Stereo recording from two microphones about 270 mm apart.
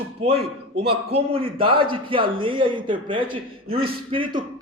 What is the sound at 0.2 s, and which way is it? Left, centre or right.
A man's voice, right.